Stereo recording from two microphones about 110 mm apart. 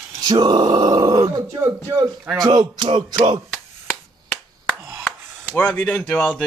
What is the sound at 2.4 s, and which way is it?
Music, 45° right (ahead or behind).